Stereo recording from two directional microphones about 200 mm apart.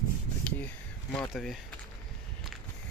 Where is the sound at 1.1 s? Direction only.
5° left (ahead or behind).